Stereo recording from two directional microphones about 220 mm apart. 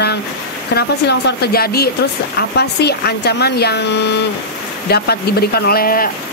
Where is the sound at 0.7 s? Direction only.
50° left (ahead or behind).